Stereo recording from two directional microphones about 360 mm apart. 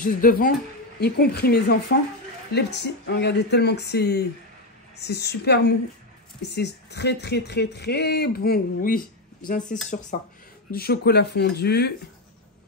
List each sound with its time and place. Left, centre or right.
0.0 s speech: left